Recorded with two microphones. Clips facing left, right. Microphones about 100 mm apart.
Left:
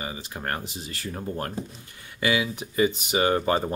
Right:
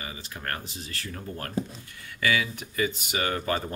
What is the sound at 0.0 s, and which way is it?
Speech, 25° left (ahead or behind).